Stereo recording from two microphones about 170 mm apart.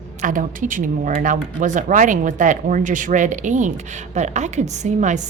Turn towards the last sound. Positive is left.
turn(degrees=-45)  # may be behind; listen again after turning